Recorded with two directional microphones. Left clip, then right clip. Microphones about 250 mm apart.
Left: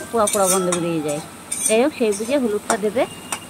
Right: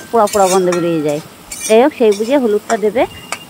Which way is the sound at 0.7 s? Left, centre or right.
Right.